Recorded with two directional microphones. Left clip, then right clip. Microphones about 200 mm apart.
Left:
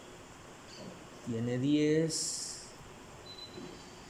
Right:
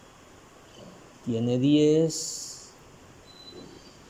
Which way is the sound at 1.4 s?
10° right (ahead or behind).